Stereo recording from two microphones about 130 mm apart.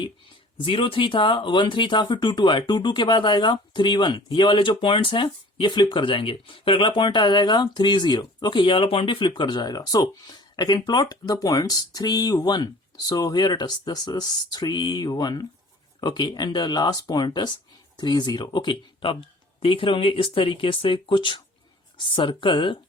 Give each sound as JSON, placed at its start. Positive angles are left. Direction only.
{"t": 0.6, "sound": "speech", "side_deg": 45}